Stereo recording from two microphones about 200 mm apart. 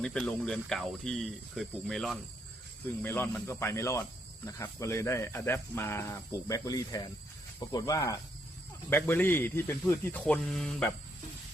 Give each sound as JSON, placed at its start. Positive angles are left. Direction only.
{"t": 0.0, "sound": "speech", "side_deg": 5}